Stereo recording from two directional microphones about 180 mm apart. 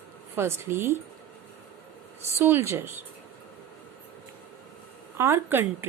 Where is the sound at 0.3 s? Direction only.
15° right (ahead or behind).